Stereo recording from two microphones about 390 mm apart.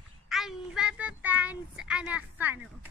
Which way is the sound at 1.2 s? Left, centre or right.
Centre.